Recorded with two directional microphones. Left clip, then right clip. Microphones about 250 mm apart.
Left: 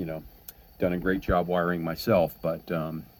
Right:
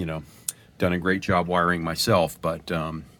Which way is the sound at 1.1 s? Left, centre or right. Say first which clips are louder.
Right 3 dB; centre.